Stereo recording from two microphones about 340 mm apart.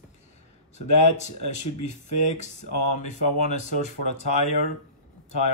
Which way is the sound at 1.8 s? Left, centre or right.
Left.